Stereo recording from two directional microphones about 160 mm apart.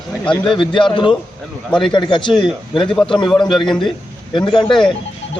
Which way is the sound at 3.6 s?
30° left (ahead or behind).